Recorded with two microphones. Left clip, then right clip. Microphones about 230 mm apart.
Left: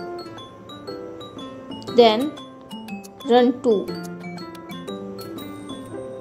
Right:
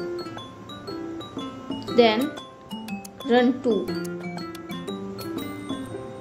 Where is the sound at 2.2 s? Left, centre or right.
Centre.